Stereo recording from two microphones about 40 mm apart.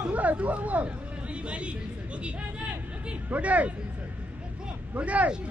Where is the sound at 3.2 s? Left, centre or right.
Right.